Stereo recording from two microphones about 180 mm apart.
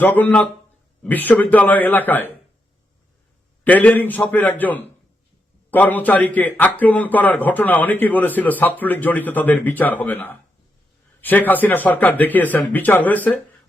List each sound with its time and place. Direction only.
0.0 s a man's voice: 10° left (ahead or behind)
3.6 s a man's voice: 10° left (ahead or behind)